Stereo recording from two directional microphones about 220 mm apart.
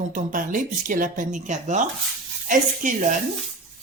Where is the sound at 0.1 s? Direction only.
35° right (ahead or behind).